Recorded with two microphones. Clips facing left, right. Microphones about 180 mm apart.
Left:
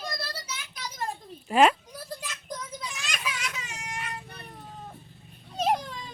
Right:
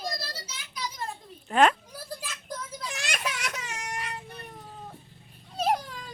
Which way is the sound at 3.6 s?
70° right (ahead or behind).